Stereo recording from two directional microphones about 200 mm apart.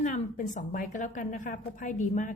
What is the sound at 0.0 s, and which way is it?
A woman's voice, 40° left (ahead or behind).